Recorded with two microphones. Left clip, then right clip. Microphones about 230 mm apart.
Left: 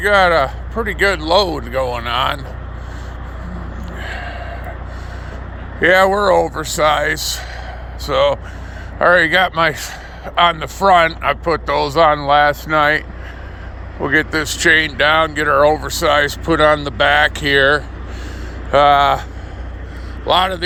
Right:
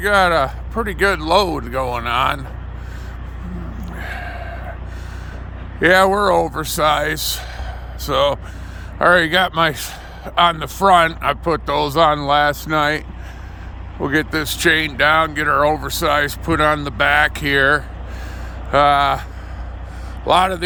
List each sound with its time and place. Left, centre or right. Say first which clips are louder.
0.0 s speech: left 2 dB; right
4.0 s gasp: left 2 dB; right
5.8 s a man's voice: left 1 dB; right
20.2 s speech: even; right